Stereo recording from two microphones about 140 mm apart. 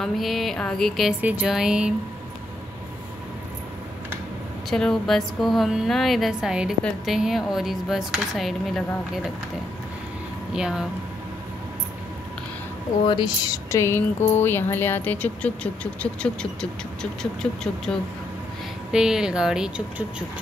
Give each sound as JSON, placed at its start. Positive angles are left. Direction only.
{"t": 0.0, "sound": "speech", "side_deg": 0}
{"t": 1.2, "sound": "speech", "side_deg": -10}
{"t": 4.6, "sound": "speech", "side_deg": 5}
{"t": 10.5, "sound": "speech", "side_deg": -5}
{"t": 13.0, "sound": "speech", "side_deg": 30}